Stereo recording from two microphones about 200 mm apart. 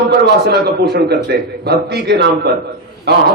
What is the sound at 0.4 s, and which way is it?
A man's voice, 55° right (ahead or behind).